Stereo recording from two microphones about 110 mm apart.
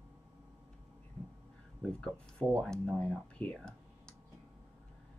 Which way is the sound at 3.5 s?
5° left (ahead or behind).